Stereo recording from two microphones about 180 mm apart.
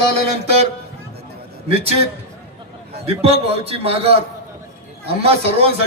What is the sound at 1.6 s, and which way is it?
Speech, 35° right (ahead or behind).